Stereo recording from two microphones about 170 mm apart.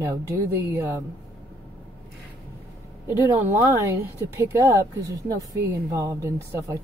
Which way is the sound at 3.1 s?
10° right (ahead or behind).